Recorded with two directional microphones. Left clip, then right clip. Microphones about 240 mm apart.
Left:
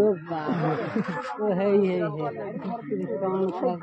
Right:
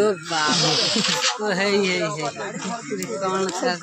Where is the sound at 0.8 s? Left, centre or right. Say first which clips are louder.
Right 9 dB; right.